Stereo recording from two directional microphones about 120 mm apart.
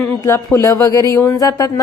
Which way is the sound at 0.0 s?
20° left (ahead or behind).